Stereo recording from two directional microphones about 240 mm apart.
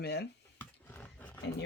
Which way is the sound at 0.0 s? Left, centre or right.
Left.